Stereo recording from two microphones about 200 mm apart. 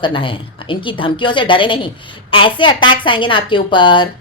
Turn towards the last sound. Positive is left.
turn(degrees=25)  # may be behind; listen again after turning